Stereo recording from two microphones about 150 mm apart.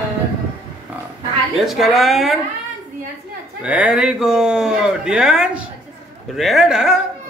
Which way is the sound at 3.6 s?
10° right (ahead or behind).